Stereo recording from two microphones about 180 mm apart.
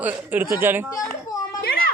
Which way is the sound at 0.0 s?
10° right (ahead or behind).